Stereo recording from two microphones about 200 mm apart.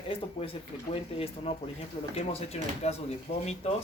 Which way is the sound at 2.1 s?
30° left (ahead or behind).